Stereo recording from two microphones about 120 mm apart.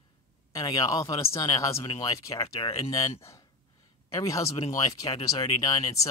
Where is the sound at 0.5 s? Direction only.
30° left (ahead or behind).